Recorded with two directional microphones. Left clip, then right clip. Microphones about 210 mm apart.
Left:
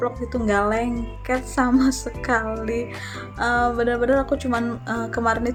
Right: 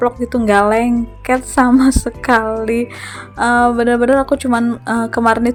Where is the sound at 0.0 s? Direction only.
35° right (ahead or behind).